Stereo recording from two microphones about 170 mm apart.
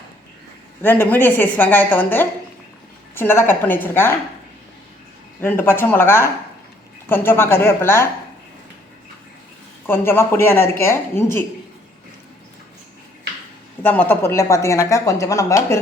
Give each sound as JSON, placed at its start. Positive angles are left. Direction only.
{"t": 0.8, "sound": "speech", "side_deg": 10}
{"t": 5.4, "sound": "speech", "side_deg": 10}
{"t": 9.8, "sound": "speech", "side_deg": 15}
{"t": 13.8, "sound": "speech", "side_deg": 10}